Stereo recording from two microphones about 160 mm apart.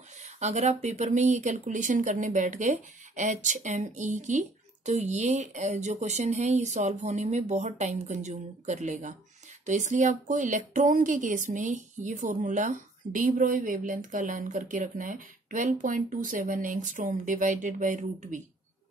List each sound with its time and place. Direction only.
0.2 s speech: 45° right (ahead or behind)